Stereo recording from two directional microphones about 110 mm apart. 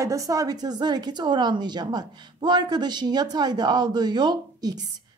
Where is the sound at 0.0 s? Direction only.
30° right (ahead or behind).